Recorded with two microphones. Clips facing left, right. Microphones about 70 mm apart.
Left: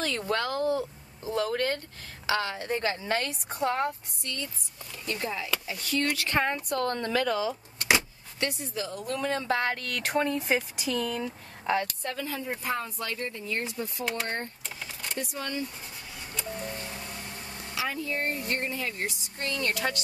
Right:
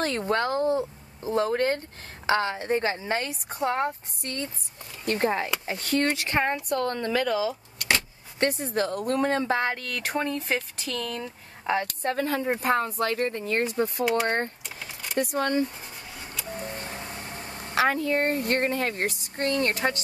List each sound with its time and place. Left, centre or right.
0.2 s speech: right
4.2 s speech: right
6.1 s speech: right
7.1 s speech: centre
8.4 s speech: right
9.5 s speech: right
9.8 s speech: centre
11.6 s a woman's voice: centre
11.9 s speech: right
16.6 s vehicle: right
17.7 s speech: right